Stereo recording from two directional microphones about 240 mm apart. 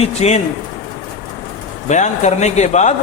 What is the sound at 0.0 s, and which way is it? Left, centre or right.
Speech, left.